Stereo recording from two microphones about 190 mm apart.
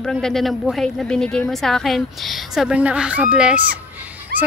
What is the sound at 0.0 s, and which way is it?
A woman's voice, 5° left (ahead or behind).